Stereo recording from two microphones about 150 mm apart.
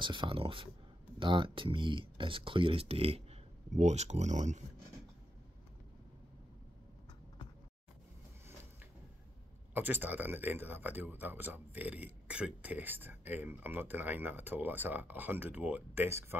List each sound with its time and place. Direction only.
0.0 s speech: 30° right (ahead or behind); by 4.6 s 50° right (ahead or behind)
9.8 s speech: 10° right (ahead or behind)